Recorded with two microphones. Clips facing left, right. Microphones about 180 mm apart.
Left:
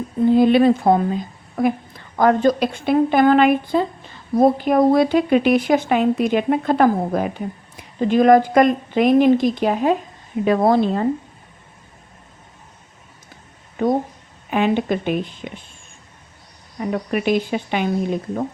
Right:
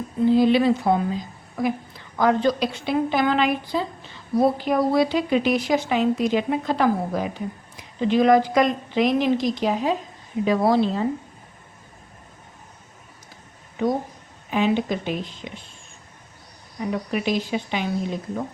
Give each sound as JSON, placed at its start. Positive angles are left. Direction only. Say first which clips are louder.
{"t": 0.3, "sound": "speech", "louder": "left 4 dB", "side_deg": 55}
{"t": 13.8, "sound": "speech", "louder": "left 4 dB", "side_deg": 50}
{"t": 16.8, "sound": "speech", "louder": "left 4 dB", "side_deg": 55}